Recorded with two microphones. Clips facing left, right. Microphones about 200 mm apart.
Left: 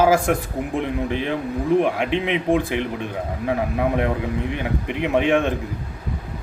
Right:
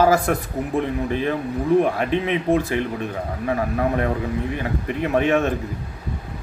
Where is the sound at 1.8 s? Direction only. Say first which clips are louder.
Even; 15° left (ahead or behind).